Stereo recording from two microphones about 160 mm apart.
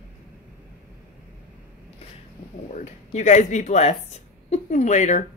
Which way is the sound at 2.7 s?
45° left (ahead or behind).